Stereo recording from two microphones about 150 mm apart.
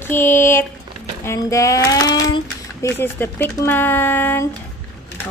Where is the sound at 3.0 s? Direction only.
15° left (ahead or behind).